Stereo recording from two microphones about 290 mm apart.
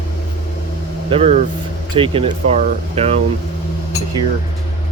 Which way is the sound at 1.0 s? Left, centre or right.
Right.